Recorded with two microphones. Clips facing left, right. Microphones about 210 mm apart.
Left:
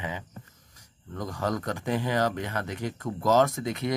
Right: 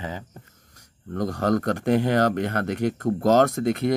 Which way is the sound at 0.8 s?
70° right (ahead or behind).